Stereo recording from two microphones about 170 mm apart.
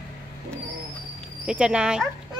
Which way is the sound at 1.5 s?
5° right (ahead or behind).